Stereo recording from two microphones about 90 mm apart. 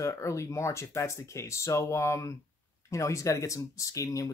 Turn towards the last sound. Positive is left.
turn(degrees=40)  # may be behind; listen again after turning